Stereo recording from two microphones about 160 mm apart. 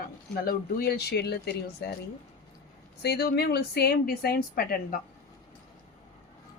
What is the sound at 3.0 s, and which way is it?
Speech, 85° left.